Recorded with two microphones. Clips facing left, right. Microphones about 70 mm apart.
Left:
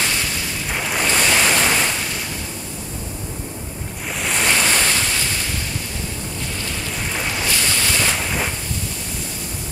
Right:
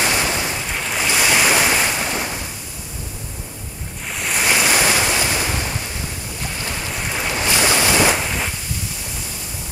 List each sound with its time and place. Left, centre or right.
0.0 s waves: right
0.7 s waves: centre
4.2 s waves: centre; by 5.7 s right
7.7 s boat: centre